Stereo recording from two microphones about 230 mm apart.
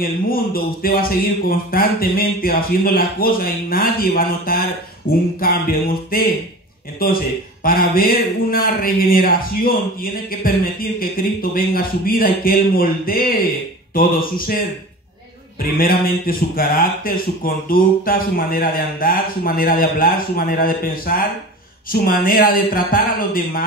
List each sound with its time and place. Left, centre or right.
0.0 s speech: left
7.6 s speech: left
15.8 s speech: left